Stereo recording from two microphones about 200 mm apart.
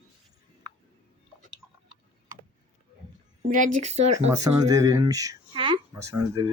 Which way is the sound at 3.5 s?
35° right (ahead or behind).